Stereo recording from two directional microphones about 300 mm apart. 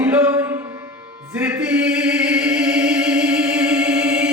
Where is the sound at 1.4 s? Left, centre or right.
Centre.